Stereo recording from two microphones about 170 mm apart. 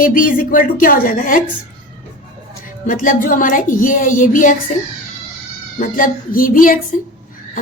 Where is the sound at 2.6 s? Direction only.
55° left (ahead or behind).